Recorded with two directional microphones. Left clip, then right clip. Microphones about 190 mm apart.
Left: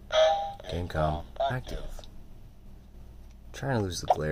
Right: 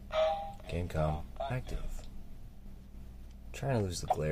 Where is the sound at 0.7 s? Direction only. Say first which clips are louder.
Left 4 dB; 15° left (ahead or behind).